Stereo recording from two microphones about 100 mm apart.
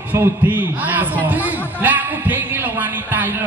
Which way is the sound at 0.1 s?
20° right (ahead or behind).